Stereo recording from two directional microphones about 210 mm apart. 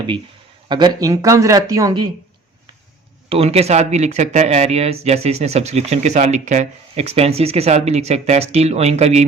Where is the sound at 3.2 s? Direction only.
30° right (ahead or behind).